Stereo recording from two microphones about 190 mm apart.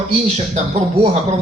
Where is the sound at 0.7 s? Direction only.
35° right (ahead or behind).